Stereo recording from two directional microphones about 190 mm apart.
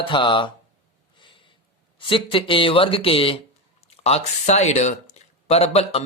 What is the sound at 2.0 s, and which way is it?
Speech, 25° left (ahead or behind).